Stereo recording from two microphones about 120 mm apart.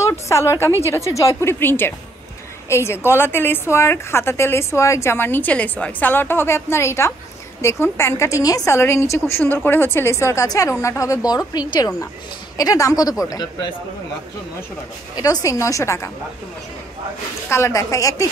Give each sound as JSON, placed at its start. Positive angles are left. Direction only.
{"t": 0.0, "sound": "a woman's voice", "side_deg": 25}
{"t": 15.4, "sound": "a woman's voice", "side_deg": 25}
{"t": 17.5, "sound": "a woman's voice", "side_deg": 20}